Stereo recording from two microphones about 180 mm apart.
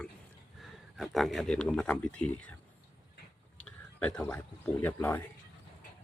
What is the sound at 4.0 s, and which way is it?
A man's voice, 5° left (ahead or behind).